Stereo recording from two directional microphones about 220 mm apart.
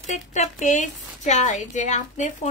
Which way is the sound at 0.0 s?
30° left (ahead or behind).